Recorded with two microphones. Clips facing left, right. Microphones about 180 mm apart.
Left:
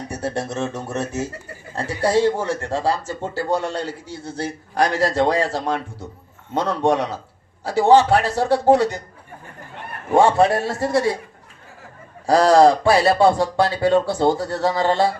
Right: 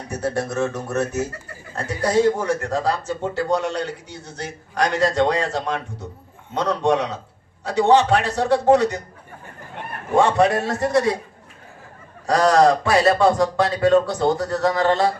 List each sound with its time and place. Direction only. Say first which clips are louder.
0.2 s a man's voice: right 3 dB; 30° left (ahead or behind)
10.2 s speech: left 2 dB; 30° left (ahead or behind)
12.2 s speech: left 3 dB; 30° left (ahead or behind)